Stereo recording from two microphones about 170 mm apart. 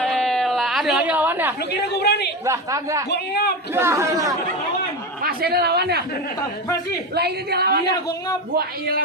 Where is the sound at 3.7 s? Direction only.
15° right (ahead or behind).